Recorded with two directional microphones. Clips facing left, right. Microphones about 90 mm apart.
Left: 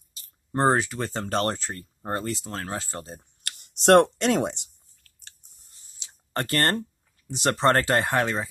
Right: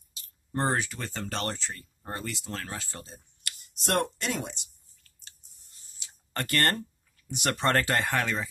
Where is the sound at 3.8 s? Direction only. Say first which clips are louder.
Left 11 dB; 60° left (ahead or behind).